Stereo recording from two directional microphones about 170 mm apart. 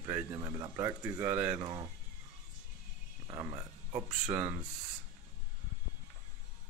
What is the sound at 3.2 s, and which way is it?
Speech, 20° right (ahead or behind).